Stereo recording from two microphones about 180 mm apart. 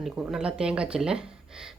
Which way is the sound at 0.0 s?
5° right (ahead or behind).